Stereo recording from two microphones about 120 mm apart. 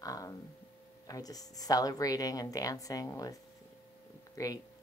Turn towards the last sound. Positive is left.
turn(degrees=30)  # may be behind; listen again after turning